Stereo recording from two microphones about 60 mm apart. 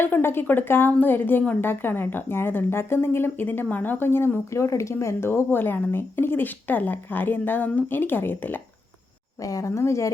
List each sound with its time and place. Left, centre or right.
0.0 s a woman's voice: left
4.5 s a woman's voice: left
9.4 s speech: left